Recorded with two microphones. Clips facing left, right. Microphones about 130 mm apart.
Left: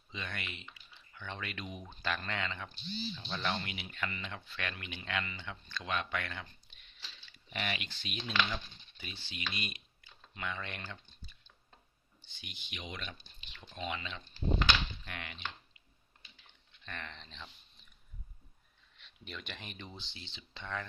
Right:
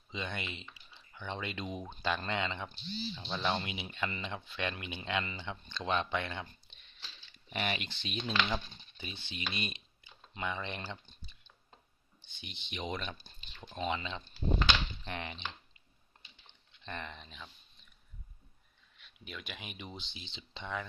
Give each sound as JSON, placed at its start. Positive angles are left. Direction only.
{"t": 0.1, "sound": "speech", "side_deg": -20}
{"t": 10.8, "sound": "typing", "side_deg": -15}
{"t": 12.4, "sound": "speech", "side_deg": -25}
{"t": 16.5, "sound": "a sound", "side_deg": -20}
{"t": 18.9, "sound": "speech", "side_deg": -5}